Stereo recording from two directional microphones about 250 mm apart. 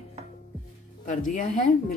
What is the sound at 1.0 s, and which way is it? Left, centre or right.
Speech, left.